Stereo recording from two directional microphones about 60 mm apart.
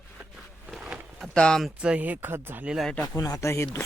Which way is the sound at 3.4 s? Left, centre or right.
Left.